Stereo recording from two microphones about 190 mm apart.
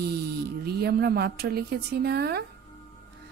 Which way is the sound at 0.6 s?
55° right (ahead or behind).